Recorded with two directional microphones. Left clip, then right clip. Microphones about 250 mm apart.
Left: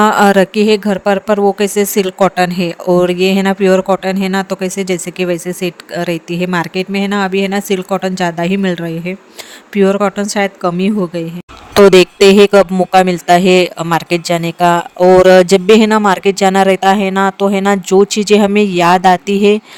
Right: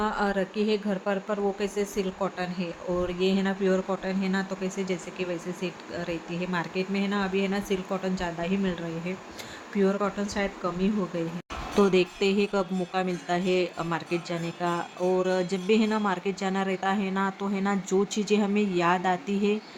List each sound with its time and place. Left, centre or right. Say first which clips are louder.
0.0 s speech: left 19 dB; left